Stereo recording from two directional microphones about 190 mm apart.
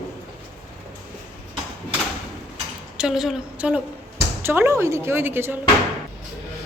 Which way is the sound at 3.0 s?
5° right (ahead or behind).